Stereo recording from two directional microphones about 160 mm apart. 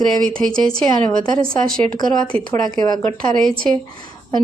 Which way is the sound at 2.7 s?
25° left (ahead or behind).